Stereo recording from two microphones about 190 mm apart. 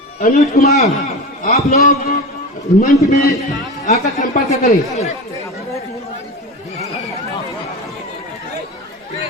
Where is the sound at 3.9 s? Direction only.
40° left (ahead or behind).